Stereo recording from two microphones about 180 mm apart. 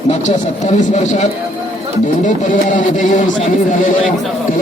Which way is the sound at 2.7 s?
45° left (ahead or behind).